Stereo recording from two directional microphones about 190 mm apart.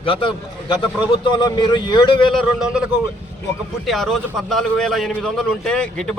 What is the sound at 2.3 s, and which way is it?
Speech, centre (ahead or behind).